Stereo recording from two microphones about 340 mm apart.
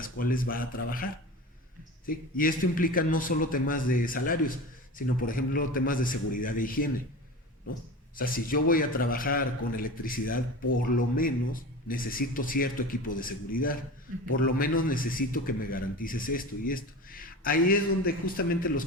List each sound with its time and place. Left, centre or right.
0.2 s a man's voice: left
2.0 s a man's voice: left
8.1 s a man's voice: left